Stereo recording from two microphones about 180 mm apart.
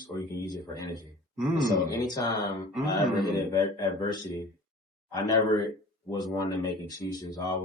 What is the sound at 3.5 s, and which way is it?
Speech, 20° left (ahead or behind).